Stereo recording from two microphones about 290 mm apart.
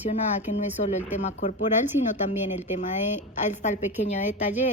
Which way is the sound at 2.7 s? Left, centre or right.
Left.